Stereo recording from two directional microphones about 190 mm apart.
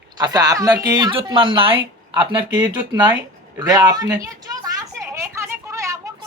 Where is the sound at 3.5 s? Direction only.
20° right (ahead or behind).